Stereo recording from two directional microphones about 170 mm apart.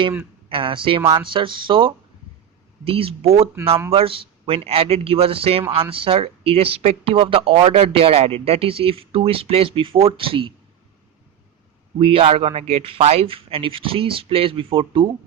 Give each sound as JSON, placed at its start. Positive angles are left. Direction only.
{"t": 0.4, "sound": "speech", "side_deg": -30}
{"t": 11.9, "sound": "speech", "side_deg": -35}